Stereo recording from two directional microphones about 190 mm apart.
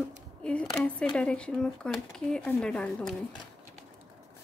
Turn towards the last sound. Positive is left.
turn(degrees=5)  # may be behind; listen again after turning